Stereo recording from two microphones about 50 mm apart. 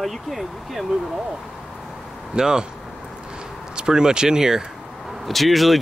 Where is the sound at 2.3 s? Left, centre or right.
Centre.